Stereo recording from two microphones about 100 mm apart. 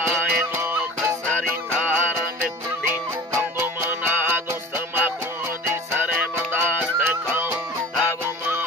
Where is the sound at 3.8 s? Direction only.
20° right (ahead or behind).